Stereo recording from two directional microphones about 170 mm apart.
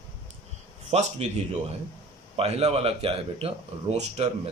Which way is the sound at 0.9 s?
40° right (ahead or behind).